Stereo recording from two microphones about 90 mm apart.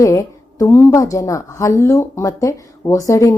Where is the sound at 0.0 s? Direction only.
35° left (ahead or behind).